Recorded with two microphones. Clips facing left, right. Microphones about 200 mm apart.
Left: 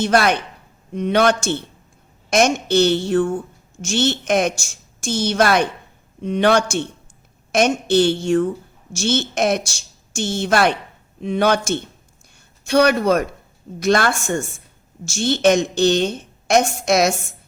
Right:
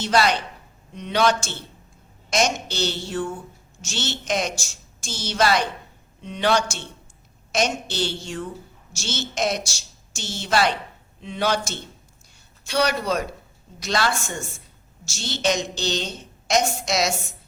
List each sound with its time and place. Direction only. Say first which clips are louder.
0.0 s a woman's voice: left 4 dB; 55° left (ahead or behind)